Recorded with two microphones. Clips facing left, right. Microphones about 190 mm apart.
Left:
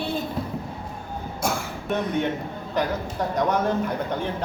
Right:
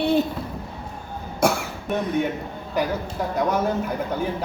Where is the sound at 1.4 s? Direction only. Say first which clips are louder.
Right 7 dB; 70° right (ahead or behind).